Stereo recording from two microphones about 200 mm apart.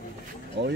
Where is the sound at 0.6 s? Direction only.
60° right (ahead or behind).